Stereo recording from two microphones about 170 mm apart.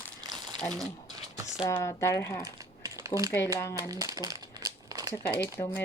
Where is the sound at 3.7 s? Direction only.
20° right (ahead or behind).